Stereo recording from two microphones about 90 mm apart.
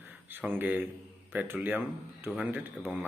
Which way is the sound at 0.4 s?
20° right (ahead or behind).